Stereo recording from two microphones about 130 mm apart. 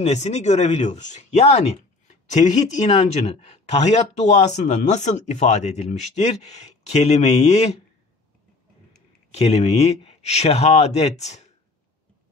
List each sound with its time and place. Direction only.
0.0 s speech: 60° left (ahead or behind)
9.3 s speech: 55° left (ahead or behind)